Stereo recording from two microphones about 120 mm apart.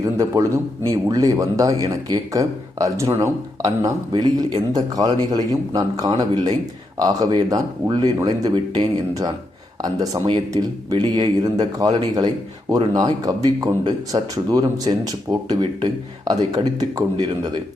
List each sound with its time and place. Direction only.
0.0 s speech: 30° right (ahead or behind)